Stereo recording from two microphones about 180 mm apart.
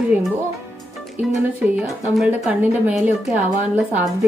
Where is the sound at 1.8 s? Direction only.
Centre (ahead or behind).